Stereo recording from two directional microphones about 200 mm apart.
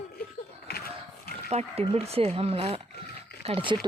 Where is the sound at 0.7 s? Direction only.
50° left (ahead or behind).